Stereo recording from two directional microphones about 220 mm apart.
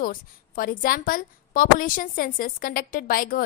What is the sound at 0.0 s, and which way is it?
A woman's voice, 40° left (ahead or behind).